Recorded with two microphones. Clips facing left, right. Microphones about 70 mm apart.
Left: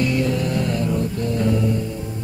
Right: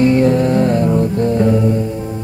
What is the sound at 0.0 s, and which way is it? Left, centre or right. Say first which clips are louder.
Music: right 9 dB; right.